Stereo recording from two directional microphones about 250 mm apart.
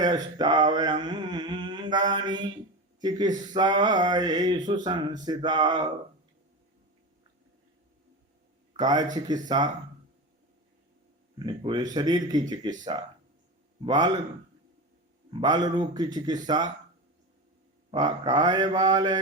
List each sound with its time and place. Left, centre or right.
0.0 s mantra: centre
3.0 s speech: centre
8.7 s speech: centre
11.3 s speech: centre
13.8 s speech: centre
15.3 s speech: centre
17.9 s speech: centre